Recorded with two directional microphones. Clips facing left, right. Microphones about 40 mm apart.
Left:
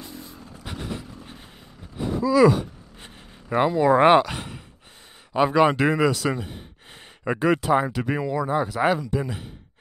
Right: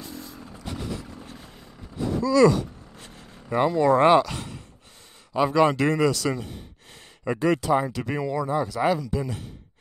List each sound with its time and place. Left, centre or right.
0.0 s vehicle: centre
0.7 s vehicle: left
1.2 s a sound: left
4.0 s speech: left
8.0 s speech: centre
8.8 s speech: left
9.1 s speech: centre